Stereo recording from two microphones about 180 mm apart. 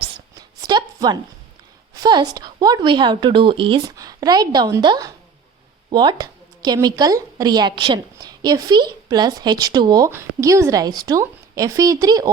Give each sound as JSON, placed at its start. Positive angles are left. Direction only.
{"t": 0.0, "sound": "writing", "side_deg": -25}
{"t": 1.9, "sound": "a woman's voice", "side_deg": -20}